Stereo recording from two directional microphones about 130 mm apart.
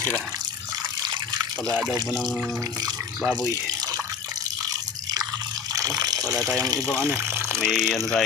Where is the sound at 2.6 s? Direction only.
30° right (ahead or behind).